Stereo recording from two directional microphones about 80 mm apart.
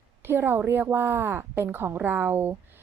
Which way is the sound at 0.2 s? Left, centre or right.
Right.